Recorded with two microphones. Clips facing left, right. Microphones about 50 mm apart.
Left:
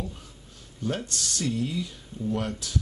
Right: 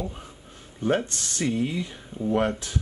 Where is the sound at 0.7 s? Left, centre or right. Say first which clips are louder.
Right 6 dB; right.